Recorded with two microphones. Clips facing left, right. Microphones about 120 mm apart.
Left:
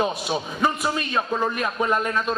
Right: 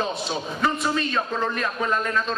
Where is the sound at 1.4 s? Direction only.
15° left (ahead or behind).